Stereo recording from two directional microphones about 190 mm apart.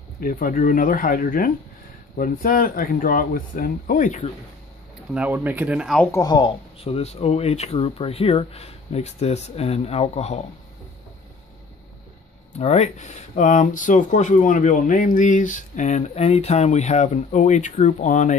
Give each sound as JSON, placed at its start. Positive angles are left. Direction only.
{"t": 0.2, "sound": "speech", "side_deg": 45}
{"t": 5.1, "sound": "speech", "side_deg": -10}
{"t": 6.1, "sound": "speech", "side_deg": 20}
{"t": 12.5, "sound": "speech", "side_deg": 35}